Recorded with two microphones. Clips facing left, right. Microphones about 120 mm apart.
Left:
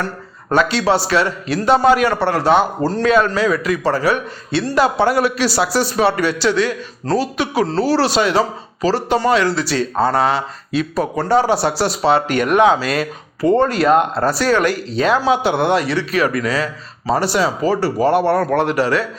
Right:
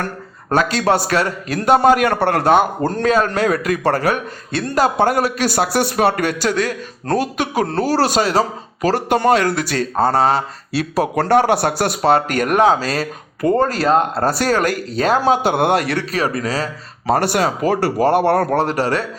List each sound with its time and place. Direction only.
0.5 s a man's voice: 45° right (ahead or behind)
8.8 s a man's voice: 55° right (ahead or behind)
10.8 s a man's voice: 75° right (ahead or behind); by 16.0 s 50° right (ahead or behind)
16.1 s speech: 35° right (ahead or behind)
17.1 s a man's voice: 55° right (ahead or behind); by 18.9 s 40° right (ahead or behind)